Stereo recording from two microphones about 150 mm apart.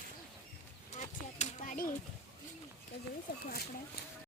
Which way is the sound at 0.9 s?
55° left (ahead or behind).